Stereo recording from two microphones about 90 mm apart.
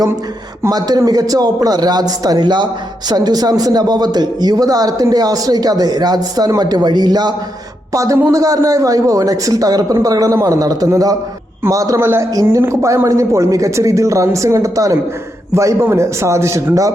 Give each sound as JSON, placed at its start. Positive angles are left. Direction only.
{"t": 0.7, "sound": "a man's voice", "side_deg": -45}
{"t": 7.9, "sound": "a man's voice", "side_deg": -40}
{"t": 11.9, "sound": "a man's voice", "side_deg": -25}